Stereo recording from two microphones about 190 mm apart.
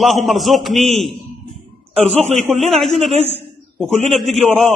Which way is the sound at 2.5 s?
Centre (ahead or behind).